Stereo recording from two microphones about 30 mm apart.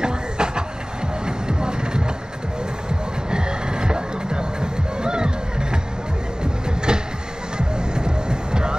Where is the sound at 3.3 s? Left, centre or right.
Right.